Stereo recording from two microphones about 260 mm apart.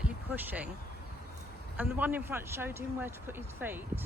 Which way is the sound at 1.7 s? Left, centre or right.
Centre.